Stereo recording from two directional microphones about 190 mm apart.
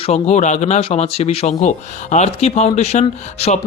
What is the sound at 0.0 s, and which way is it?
Speech, 35° left (ahead or behind).